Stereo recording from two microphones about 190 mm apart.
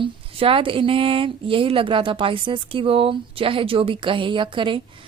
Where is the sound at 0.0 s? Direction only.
30° right (ahead or behind).